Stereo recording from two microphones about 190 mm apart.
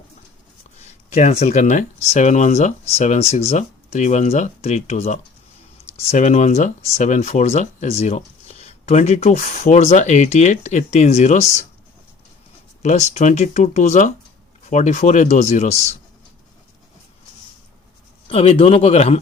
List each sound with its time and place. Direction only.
0.8 s speech: 35° left (ahead or behind)
12.8 s speech: 40° left (ahead or behind)
18.3 s speech: 30° left (ahead or behind)